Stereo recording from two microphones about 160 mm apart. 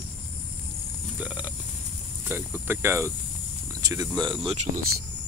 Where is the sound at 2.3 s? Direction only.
15° right (ahead or behind); by 4.7 s 35° right (ahead or behind).